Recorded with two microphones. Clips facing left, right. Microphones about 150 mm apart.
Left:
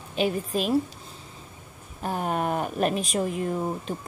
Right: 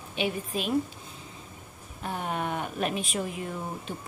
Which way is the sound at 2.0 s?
40° left (ahead or behind).